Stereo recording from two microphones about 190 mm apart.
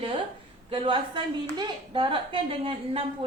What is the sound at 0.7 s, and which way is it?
Speech, 25° right (ahead or behind).